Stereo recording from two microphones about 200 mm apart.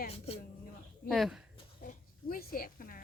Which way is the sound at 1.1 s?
Centre (ahead or behind).